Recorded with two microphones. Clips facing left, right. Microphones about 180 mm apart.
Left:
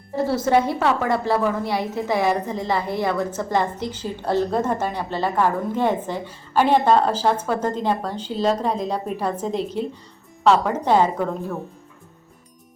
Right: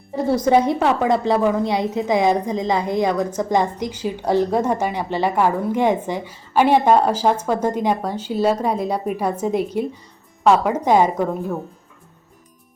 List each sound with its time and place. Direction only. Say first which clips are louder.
0.3 s a woman's voice: right 4 dB; 20° right (ahead or behind)